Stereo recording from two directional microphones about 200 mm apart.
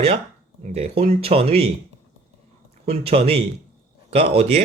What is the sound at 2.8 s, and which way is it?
Speech, 30° right (ahead or behind).